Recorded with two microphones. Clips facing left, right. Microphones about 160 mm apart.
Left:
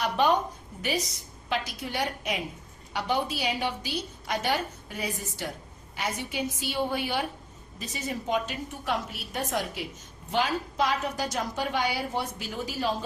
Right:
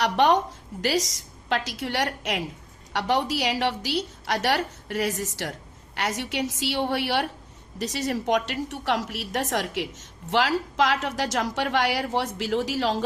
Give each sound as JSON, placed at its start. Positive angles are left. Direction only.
{"t": 0.0, "sound": "a woman's voice", "side_deg": -85}